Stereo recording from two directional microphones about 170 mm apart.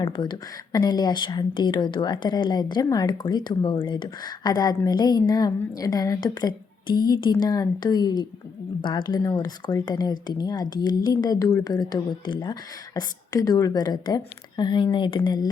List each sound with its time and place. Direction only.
0.0 s a woman's voice: 25° left (ahead or behind)